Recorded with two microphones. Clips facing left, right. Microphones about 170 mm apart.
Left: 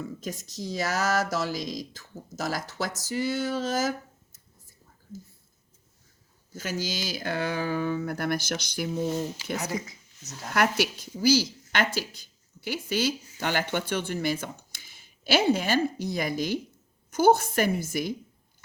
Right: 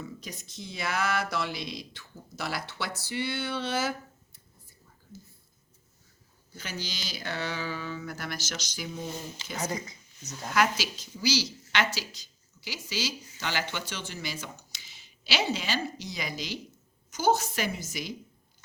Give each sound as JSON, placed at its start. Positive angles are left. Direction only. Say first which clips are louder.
{"t": 0.0, "sound": "speech", "louder": "left 6 dB", "side_deg": 45}
{"t": 6.5, "sound": "speech", "louder": "left 7 dB", "side_deg": 45}
{"t": 9.4, "sound": "speech", "louder": "left 8 dB", "side_deg": 5}
{"t": 10.5, "sound": "a woman's voice", "louder": "left 2 dB", "side_deg": 60}